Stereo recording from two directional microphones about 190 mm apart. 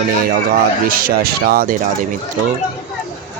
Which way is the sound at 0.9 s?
50° right (ahead or behind).